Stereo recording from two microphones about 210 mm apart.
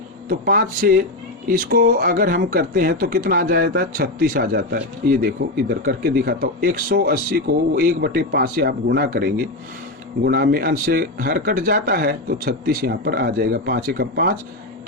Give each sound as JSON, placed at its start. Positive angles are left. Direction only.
{"t": 0.3, "sound": "speech", "side_deg": -45}